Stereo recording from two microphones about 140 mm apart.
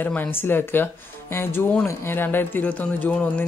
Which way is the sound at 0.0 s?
15° left (ahead or behind).